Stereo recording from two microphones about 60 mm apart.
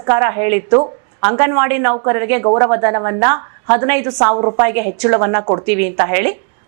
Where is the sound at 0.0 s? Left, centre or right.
Right.